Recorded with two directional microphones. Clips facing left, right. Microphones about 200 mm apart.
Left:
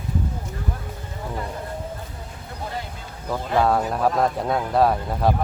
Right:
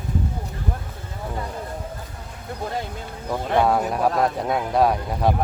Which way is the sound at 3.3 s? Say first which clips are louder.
Right 1 dB; 5° right (ahead or behind).